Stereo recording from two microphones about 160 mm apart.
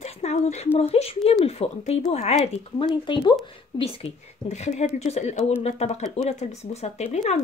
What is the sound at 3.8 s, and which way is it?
A woman's voice, 40° left (ahead or behind).